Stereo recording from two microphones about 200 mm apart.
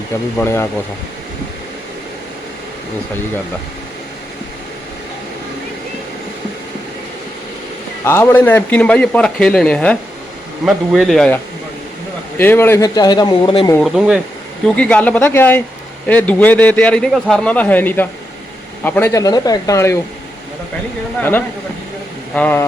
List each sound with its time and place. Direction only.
0.3 s a man's voice: 10° left (ahead or behind)
8.0 s a man's voice: 15° left (ahead or behind)
12.4 s speech: 10° left (ahead or behind)
13.7 s a man's voice: centre (ahead or behind); by 20.0 s 15° left (ahead or behind)
21.2 s a man's voice: 10° left (ahead or behind)